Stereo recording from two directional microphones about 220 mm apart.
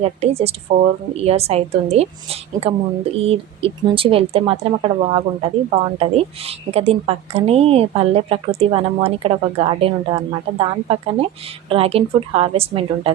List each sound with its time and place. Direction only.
0.0 s speech: 30° right (ahead or behind)